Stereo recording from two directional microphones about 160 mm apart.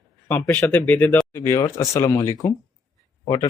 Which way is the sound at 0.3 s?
10° left (ahead or behind).